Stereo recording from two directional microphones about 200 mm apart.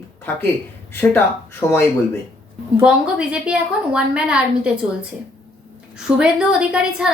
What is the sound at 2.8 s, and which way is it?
A woman's voice, 5° right (ahead or behind).